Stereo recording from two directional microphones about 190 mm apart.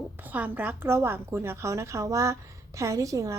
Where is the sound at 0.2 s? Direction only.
10° right (ahead or behind).